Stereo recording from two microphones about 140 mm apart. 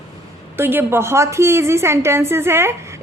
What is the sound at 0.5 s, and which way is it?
A woman's voice, 15° right (ahead or behind).